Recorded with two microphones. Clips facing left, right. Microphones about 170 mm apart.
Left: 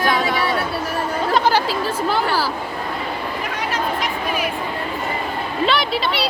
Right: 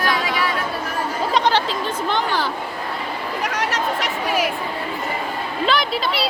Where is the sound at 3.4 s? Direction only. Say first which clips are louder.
Right 1 dB; 90° right.